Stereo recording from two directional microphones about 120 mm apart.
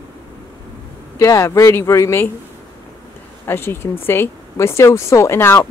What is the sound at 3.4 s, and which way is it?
Speech, 20° left (ahead or behind).